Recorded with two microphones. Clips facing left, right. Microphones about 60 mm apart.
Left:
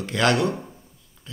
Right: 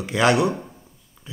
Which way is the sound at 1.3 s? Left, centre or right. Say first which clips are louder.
Right 3 dB; centre.